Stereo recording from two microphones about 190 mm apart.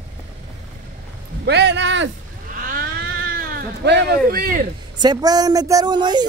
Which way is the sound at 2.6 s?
45° right (ahead or behind).